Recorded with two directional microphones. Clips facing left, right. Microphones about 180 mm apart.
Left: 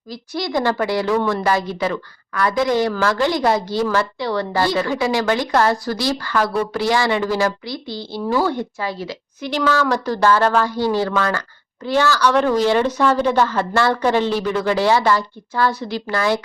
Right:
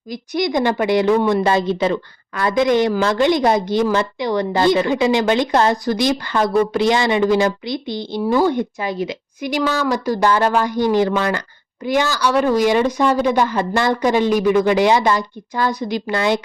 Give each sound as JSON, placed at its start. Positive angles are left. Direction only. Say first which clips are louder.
{"t": 0.1, "sound": "a woman's voice", "louder": "right 3 dB", "side_deg": -20}